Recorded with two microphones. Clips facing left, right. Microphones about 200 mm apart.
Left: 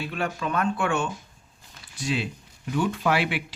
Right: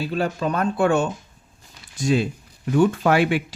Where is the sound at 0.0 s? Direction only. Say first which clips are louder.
Right 6 dB; 35° right (ahead or behind).